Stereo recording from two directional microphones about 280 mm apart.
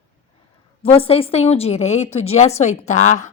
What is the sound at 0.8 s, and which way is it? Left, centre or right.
A woman's voice, centre.